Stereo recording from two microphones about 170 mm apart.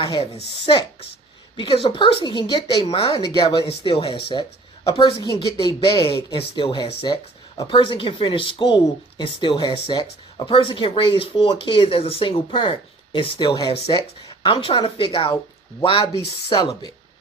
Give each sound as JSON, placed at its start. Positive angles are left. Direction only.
{"t": 0.0, "sound": "speech", "side_deg": 30}